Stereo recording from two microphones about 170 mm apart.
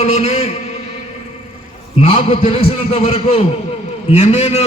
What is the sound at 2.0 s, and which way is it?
A man's voice, 35° left (ahead or behind).